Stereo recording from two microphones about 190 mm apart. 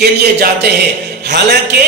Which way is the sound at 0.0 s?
60° right (ahead or behind).